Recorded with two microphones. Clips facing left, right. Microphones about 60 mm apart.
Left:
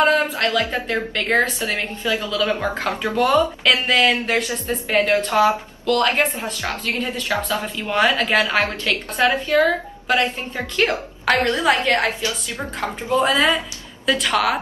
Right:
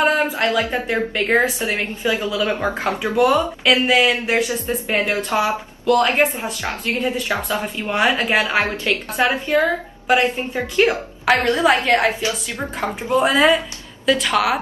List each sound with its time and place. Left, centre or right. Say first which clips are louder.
0.0 s a sound: even; centre
1.1 s a woman's voice: right 1 dB; centre
2.8 s a woman's voice: right 5 dB; centre
12.2 s a woman's voice: right 2 dB; right
13.1 s a woman's voice: right 2 dB; centre